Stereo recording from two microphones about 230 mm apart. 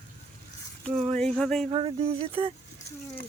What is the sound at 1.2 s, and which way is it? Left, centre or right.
Speech, centre.